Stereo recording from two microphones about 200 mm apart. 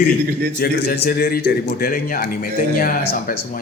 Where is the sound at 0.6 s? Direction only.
50° left (ahead or behind).